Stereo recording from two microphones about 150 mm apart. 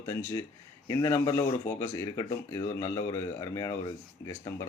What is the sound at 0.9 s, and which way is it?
Speech, 20° left (ahead or behind).